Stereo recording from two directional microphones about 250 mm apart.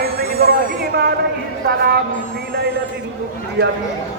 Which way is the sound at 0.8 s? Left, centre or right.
Right.